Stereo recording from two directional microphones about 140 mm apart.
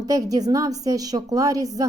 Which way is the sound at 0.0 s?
25° right (ahead or behind).